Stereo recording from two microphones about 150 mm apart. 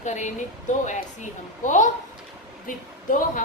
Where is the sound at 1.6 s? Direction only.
55° left (ahead or behind).